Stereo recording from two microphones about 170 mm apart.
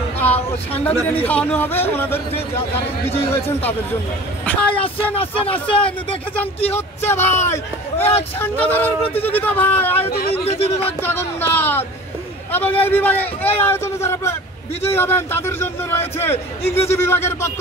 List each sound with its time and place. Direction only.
0.2 s speech: 10° left (ahead or behind)
4.5 s speech: 5° left (ahead or behind)
5.1 s speech: 35° left (ahead or behind)
5.8 s speech: 10° left (ahead or behind)
10.4 s speech: 35° left (ahead or behind)
11.0 s speech: 10° left (ahead or behind)